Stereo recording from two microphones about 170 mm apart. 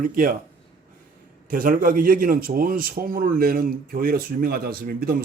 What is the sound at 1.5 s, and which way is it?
A man's voice, 55° right (ahead or behind).